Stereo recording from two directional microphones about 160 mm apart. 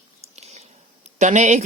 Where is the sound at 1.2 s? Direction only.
50° right (ahead or behind).